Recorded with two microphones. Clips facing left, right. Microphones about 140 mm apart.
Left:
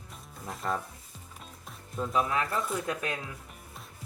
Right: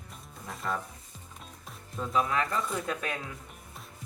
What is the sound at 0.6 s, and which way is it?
Speech, 30° left (ahead or behind).